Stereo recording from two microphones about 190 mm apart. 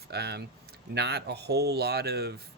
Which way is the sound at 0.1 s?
60° right (ahead or behind).